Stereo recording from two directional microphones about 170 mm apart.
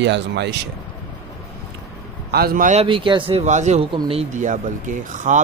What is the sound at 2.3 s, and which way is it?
Speech, 65° right (ahead or behind).